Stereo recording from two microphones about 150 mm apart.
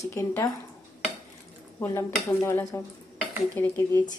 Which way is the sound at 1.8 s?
20° left (ahead or behind).